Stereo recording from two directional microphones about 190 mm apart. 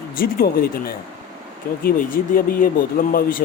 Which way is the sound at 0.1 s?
50° left (ahead or behind).